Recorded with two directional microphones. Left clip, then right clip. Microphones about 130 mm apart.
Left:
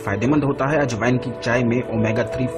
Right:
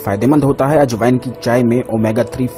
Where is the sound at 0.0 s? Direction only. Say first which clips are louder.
Right 6 dB; 50° right (ahead or behind).